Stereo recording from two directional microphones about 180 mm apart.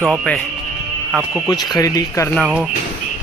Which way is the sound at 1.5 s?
20° left (ahead or behind).